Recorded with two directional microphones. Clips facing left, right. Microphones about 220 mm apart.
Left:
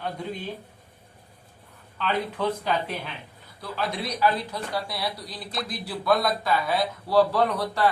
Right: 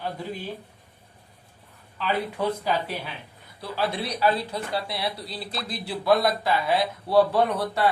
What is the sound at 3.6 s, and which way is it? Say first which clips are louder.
Speech: right 2 dB; 30° right (ahead or behind).